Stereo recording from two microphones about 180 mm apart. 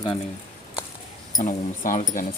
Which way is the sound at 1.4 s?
45° left (ahead or behind).